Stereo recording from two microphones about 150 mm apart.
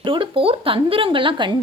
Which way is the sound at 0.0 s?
35° right (ahead or behind).